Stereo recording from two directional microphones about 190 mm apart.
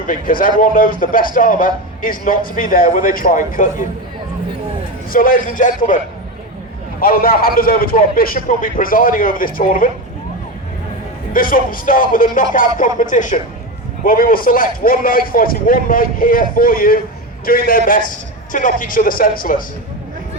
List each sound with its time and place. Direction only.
0.1 s a man's voice: 45° left (ahead or behind)
5.1 s a man's voice: 45° left (ahead or behind)
7.0 s a man's voice: 50° left (ahead or behind)
11.3 s a man's voice: 45° left (ahead or behind)